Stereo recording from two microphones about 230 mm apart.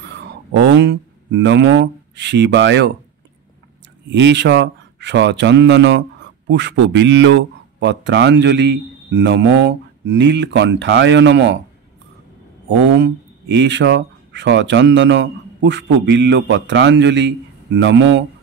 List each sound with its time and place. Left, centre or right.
0.0 s speech: right
4.1 s a man's voice: right
12.9 s a man's voice: right